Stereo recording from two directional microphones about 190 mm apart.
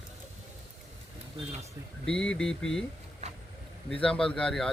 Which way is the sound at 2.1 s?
5° left (ahead or behind).